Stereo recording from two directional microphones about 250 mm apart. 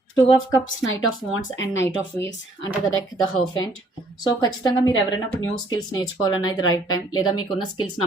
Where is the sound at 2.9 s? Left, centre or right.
Left.